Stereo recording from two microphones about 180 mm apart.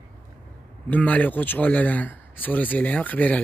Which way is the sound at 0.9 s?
10° left (ahead or behind).